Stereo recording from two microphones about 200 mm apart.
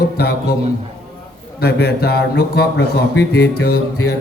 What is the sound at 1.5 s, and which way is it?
A man's voice, 55° left (ahead or behind).